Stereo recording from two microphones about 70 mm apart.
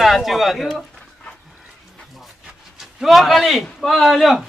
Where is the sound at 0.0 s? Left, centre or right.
Centre.